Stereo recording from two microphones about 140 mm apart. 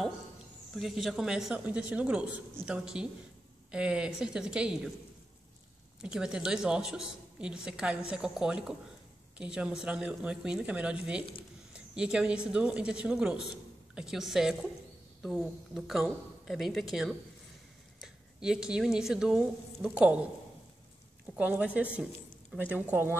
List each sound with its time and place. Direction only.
0.7 s speech: centre (ahead or behind)
6.0 s a woman's voice: 5° right (ahead or behind)
21.4 s speech: 10° right (ahead or behind)